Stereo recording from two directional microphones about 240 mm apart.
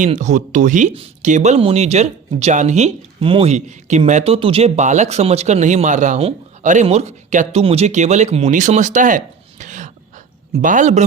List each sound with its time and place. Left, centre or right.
0.0 s speech: right